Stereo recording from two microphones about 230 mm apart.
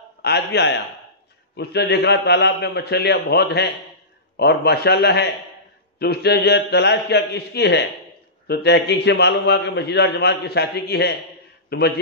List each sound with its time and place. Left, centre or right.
0.2 s a man's voice: left